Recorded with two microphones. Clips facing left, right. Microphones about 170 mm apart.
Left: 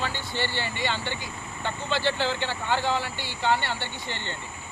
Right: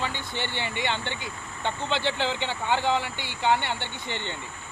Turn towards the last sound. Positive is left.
turn(degrees=-15)  # may be behind; listen again after turning